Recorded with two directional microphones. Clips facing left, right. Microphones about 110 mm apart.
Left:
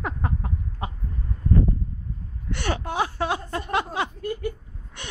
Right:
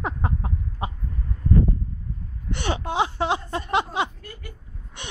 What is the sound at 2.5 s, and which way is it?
Speech, 20° right (ahead or behind).